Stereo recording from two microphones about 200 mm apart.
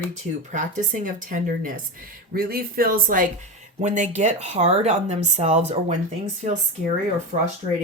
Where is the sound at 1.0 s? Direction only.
40° right (ahead or behind).